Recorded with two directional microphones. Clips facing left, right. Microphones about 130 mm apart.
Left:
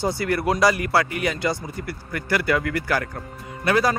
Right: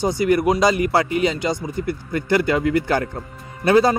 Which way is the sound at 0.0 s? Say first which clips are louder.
Right 5 dB; 15° right (ahead or behind).